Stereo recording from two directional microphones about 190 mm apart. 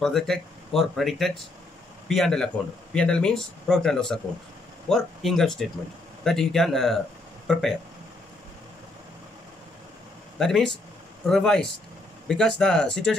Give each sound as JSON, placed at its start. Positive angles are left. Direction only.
{"t": 0.0, "sound": "speech", "side_deg": 0}
{"t": 10.4, "sound": "speech", "side_deg": 0}